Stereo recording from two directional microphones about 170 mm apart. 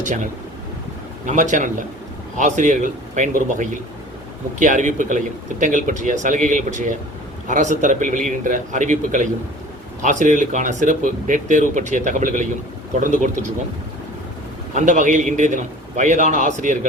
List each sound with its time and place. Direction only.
0.0 s speech: 50° right (ahead or behind)
1.3 s speech: 45° right (ahead or behind)
14.8 s speech: 45° right (ahead or behind)